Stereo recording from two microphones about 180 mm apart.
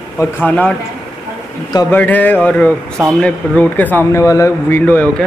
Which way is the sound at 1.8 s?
10° left (ahead or behind).